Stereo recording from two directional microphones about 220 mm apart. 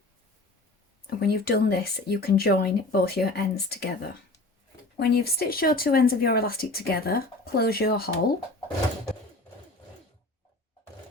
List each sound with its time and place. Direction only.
1.2 s speech: 45° left (ahead or behind)